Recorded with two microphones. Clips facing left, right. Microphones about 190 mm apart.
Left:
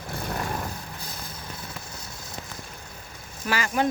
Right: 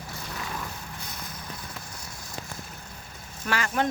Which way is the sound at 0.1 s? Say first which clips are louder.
Left 7 dB; 55° left (ahead or behind).